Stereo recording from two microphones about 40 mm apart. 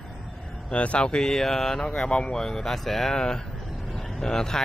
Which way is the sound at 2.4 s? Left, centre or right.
Centre.